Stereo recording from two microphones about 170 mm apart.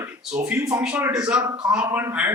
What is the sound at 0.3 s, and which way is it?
Speech, 5° right (ahead or behind).